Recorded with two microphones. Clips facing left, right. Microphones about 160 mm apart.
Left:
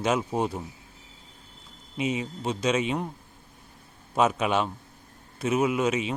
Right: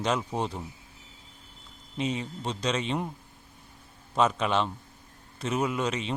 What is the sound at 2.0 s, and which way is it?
Speech, 10° left (ahead or behind).